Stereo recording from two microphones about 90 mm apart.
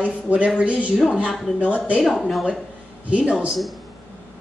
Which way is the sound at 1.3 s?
Centre (ahead or behind).